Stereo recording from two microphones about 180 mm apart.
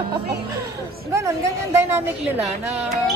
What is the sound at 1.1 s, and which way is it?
A woman's voice, 15° right (ahead or behind).